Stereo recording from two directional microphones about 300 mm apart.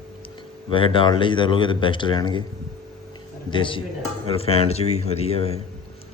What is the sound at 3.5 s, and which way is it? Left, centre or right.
Speech, centre.